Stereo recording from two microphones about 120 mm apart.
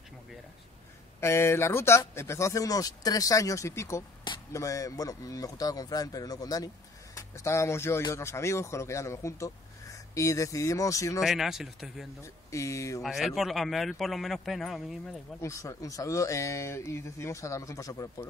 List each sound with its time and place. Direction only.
1.2 s speech: 20° left (ahead or behind)
11.1 s a man's voice: 5° right (ahead or behind)
12.2 s speech: 25° left (ahead or behind)
13.0 s a man's voice: centre (ahead or behind)
15.4 s speech: 25° left (ahead or behind)